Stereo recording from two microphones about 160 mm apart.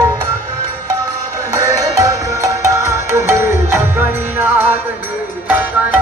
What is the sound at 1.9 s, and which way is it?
Music, 20° right (ahead or behind).